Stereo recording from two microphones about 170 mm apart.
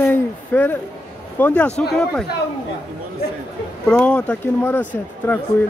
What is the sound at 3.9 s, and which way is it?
Speech, 5° left (ahead or behind).